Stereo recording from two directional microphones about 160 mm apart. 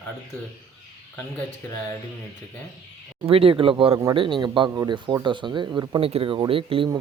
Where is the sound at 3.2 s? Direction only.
35° right (ahead or behind).